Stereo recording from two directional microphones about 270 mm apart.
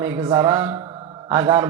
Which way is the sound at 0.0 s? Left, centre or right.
Centre.